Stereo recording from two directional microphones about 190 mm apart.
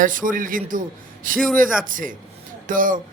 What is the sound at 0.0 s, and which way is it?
A man's voice, 45° right (ahead or behind).